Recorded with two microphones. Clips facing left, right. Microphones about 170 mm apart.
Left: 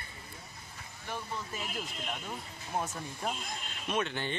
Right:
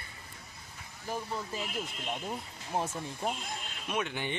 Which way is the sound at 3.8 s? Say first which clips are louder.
Left 1 dB; 10° right (ahead or behind).